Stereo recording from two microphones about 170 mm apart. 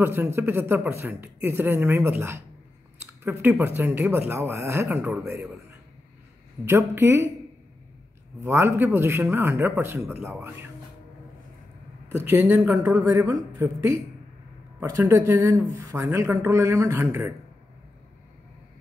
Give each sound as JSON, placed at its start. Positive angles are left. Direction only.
{"t": 0.0, "sound": "speech", "side_deg": -15}
{"t": 6.6, "sound": "speech", "side_deg": -15}
{"t": 8.5, "sound": "speech", "side_deg": -15}
{"t": 12.3, "sound": "speech", "side_deg": -15}